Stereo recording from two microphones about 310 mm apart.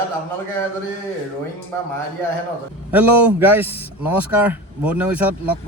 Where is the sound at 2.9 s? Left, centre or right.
Centre.